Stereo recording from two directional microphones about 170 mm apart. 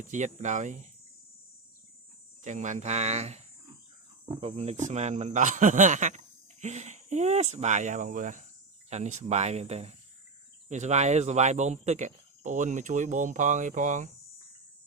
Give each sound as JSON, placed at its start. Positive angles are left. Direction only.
{"t": 0.1, "sound": "speech", "side_deg": -45}
{"t": 2.4, "sound": "speech", "side_deg": -45}